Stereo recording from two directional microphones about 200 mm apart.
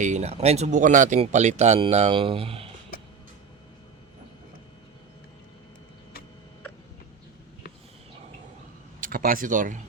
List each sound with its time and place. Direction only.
0.0 s speech: 35° right (ahead or behind)
9.0 s speech: 45° right (ahead or behind)